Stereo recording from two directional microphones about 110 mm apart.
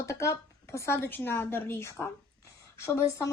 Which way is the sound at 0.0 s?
25° left (ahead or behind).